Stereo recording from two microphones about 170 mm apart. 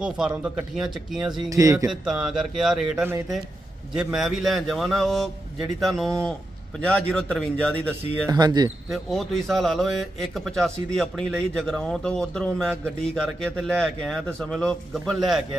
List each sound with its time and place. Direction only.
0.0 s a man's voice: 5° right (ahead or behind)
1.5 s speech: 20° right (ahead or behind)
1.9 s a man's voice: 5° right (ahead or behind)
8.3 s speech: 25° right (ahead or behind)
8.9 s a man's voice: centre (ahead or behind)